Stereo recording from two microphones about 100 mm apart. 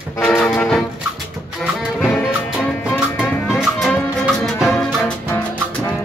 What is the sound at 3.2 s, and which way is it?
Music, 5° right (ahead or behind).